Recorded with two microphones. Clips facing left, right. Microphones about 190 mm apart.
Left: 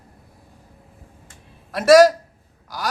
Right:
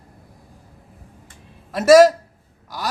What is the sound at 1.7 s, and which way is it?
Speech, centre (ahead or behind).